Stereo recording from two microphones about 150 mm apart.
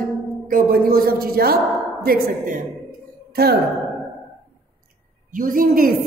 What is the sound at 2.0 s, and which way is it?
Speech, 70° right (ahead or behind).